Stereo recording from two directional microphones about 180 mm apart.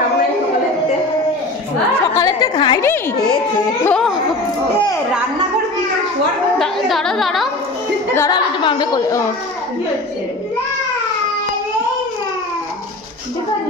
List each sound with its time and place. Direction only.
2.0 s a sound: 15° left (ahead or behind)
3.8 s a woman's voice: 5° left (ahead or behind)
6.6 s a woman's voice: centre (ahead or behind)
8.1 s a woman's voice: 15° left (ahead or behind)